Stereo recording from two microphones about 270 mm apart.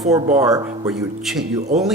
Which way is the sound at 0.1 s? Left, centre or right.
Centre.